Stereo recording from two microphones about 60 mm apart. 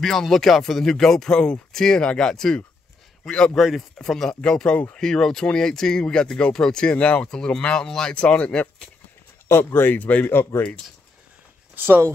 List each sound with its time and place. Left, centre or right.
0.0 s speech: centre
3.5 s speech: centre
9.5 s speech: left
10.0 s speech: left
10.5 s speech: left
11.7 s speech: right